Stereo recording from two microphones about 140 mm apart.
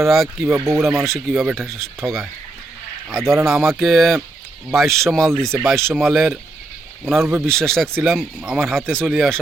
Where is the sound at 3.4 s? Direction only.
5° right (ahead or behind).